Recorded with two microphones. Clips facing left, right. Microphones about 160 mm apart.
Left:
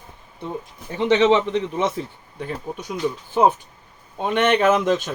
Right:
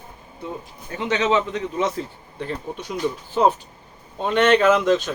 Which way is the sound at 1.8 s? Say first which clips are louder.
Even; 20° left (ahead or behind).